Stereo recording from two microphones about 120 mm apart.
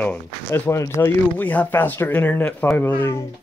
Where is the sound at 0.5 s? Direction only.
20° left (ahead or behind).